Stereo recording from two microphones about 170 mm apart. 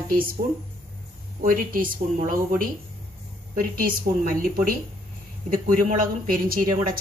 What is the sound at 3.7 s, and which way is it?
A woman's voice, 55° right (ahead or behind).